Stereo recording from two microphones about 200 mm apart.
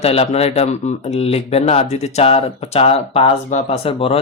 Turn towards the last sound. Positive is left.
turn(degrees=30)  # may be behind; listen again after turning